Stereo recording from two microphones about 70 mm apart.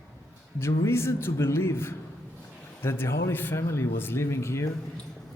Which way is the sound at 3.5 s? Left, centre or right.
Left.